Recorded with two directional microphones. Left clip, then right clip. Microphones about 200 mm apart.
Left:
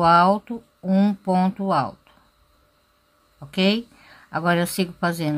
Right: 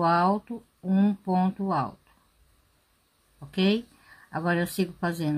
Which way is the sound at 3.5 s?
20° left (ahead or behind).